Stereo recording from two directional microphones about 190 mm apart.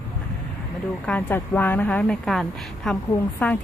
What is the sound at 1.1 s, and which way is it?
A woman's voice, 10° left (ahead or behind).